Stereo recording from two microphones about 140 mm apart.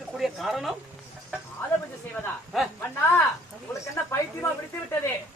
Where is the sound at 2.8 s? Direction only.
15° left (ahead or behind).